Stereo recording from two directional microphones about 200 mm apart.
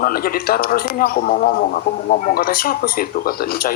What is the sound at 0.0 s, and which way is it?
Speech, 45° left (ahead or behind).